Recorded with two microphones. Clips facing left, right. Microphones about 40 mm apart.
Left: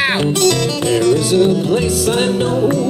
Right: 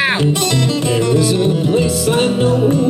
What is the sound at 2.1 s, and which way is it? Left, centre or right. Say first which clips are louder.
Music: right 1 dB; centre.